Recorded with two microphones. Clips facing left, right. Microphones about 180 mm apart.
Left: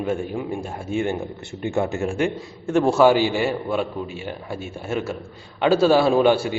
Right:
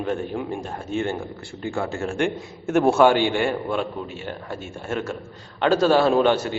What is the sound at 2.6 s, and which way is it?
A man's voice, centre (ahead or behind).